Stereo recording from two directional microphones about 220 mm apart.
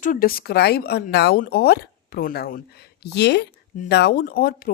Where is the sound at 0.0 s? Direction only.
40° left (ahead or behind).